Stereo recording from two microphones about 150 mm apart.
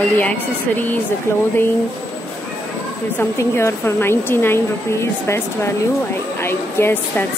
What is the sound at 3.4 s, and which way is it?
A woman's voice, 20° left (ahead or behind).